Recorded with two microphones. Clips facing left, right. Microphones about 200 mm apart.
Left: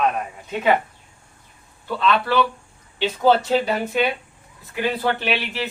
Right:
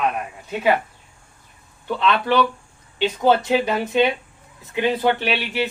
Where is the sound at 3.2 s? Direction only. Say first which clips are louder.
Left 1 dB; 15° right (ahead or behind).